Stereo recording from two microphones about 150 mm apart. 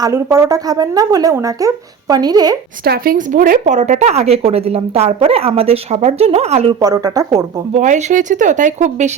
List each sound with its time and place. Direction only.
0.0 s speech: 20° right (ahead or behind)
2.8 s speech: 85° right; by 6.7 s 45° right (ahead or behind)
6.7 s speech: 25° right (ahead or behind)
7.7 s speech: 55° right (ahead or behind)